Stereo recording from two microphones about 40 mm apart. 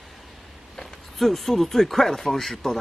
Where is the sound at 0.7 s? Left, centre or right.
Centre.